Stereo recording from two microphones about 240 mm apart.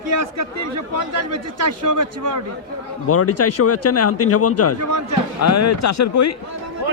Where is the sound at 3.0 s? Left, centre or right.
Left.